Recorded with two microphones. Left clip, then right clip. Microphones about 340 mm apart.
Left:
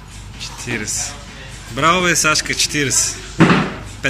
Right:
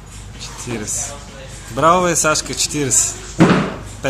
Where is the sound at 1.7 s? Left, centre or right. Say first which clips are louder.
Right 1 dB; centre.